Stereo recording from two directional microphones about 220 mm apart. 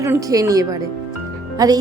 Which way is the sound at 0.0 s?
15° right (ahead or behind).